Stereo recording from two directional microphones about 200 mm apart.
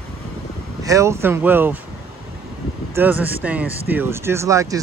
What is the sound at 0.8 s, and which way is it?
Speech, 15° right (ahead or behind).